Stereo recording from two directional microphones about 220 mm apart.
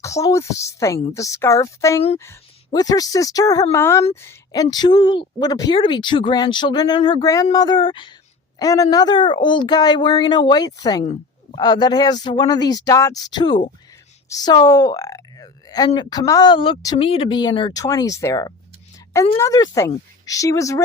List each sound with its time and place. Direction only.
0.0 s a woman's voice: 15° left (ahead or behind)
11.0 s a sound: 30° left (ahead or behind)
11.6 s a woman's voice: 20° left (ahead or behind)